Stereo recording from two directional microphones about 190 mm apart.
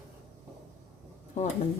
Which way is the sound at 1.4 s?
35° left (ahead or behind).